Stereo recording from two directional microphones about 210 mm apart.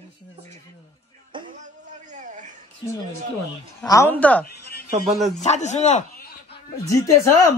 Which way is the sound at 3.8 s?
15° left (ahead or behind).